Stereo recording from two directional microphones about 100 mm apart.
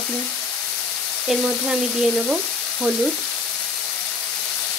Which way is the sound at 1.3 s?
5° right (ahead or behind).